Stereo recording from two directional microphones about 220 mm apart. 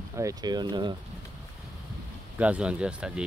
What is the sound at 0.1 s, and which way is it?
Speech, 15° right (ahead or behind).